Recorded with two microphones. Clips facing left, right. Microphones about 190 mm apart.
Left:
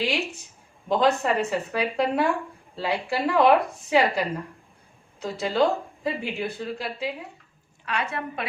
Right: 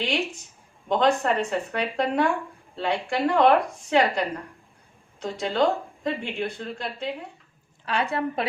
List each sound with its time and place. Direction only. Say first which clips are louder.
0.9 s a woman's voice: even; 5° left (ahead or behind)
7.9 s a woman's voice: right 4 dB; 35° right (ahead or behind)